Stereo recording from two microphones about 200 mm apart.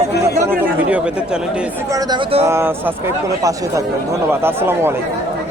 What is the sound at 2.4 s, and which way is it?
A man's voice, 10° right (ahead or behind).